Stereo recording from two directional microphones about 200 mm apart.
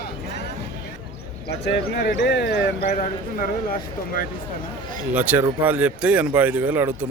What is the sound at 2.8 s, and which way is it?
Speech, 40° left (ahead or behind).